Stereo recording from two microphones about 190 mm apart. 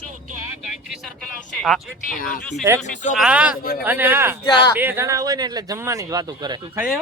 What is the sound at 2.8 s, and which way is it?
Speech, 40° left (ahead or behind).